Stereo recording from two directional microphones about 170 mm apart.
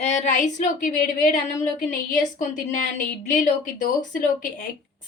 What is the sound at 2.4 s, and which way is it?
A woman's voice, 50° left (ahead or behind).